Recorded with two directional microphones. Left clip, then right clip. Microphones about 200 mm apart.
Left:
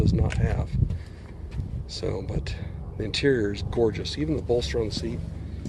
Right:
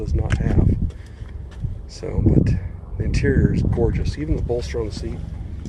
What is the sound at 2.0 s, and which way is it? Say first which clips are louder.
Speech: right 10 dB; 10° left (ahead or behind).